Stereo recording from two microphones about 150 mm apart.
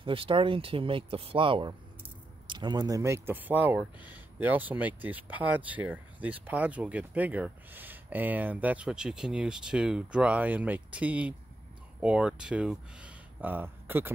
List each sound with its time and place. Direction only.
0.0 s speech: 35° right (ahead or behind); by 14.1 s 15° right (ahead or behind)